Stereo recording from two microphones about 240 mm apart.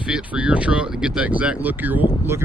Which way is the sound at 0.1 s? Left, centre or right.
Centre.